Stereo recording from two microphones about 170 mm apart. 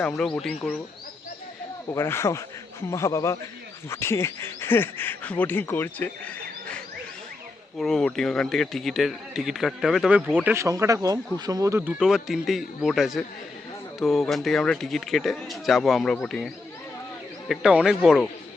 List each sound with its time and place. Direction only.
0.2 s speech: 5° left (ahead or behind)
1.9 s speech: 15° left (ahead or behind)
7.8 s speech: 5° left (ahead or behind)
10.4 s speech: 15° right (ahead or behind); by 16.5 s 5° left (ahead or behind)
17.5 s speech: 5° right (ahead or behind)